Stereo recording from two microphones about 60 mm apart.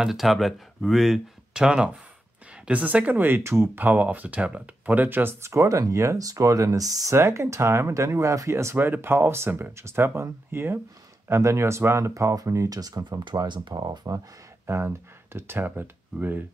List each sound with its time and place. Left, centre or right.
0.0 s speech: centre
2.6 s speech: right
3.8 s speech: right
5.4 s speech: right
7.2 s speech: right
8.7 s speech: right
14.7 s speech: right